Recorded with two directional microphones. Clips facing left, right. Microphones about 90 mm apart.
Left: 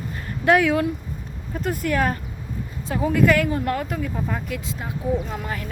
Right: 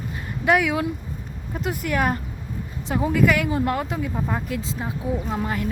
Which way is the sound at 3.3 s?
20° right (ahead or behind).